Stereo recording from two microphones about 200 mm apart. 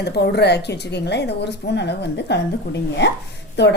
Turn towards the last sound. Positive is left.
turn(degrees=60)  # may be behind; listen again after turning